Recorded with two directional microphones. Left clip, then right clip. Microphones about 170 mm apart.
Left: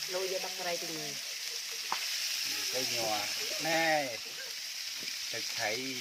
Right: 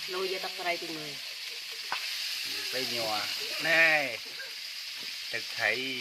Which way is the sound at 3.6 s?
15° right (ahead or behind).